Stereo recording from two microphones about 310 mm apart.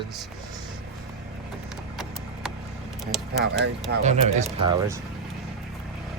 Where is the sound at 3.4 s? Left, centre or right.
Right.